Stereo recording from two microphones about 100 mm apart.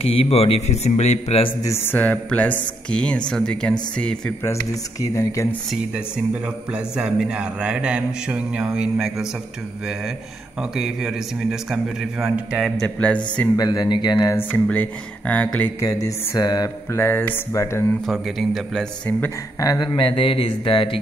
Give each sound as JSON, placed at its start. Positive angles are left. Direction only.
{"t": 0.0, "sound": "a man's voice", "side_deg": 80}
{"t": 1.9, "sound": "speech", "side_deg": 15}
{"t": 5.0, "sound": "a sound", "side_deg": 35}
{"t": 6.7, "sound": "mantra", "side_deg": -10}
{"t": 8.7, "sound": "a man's voice", "side_deg": -5}
{"t": 10.8, "sound": "a man's voice", "side_deg": -5}
{"t": 12.8, "sound": "speech", "side_deg": 10}
{"t": 13.6, "sound": "speech", "side_deg": 45}
{"t": 14.3, "sound": "speech", "side_deg": 15}
{"t": 15.8, "sound": "a sound", "side_deg": 35}
{"t": 16.9, "sound": "speech", "side_deg": 20}
{"t": 18.0, "sound": "a man's voice", "side_deg": 0}
{"t": 19.6, "sound": "a sound", "side_deg": 35}
{"t": 20.0, "sound": "speech", "side_deg": 60}